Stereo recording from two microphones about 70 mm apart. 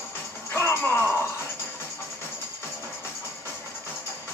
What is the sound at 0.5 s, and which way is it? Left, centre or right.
Music, left.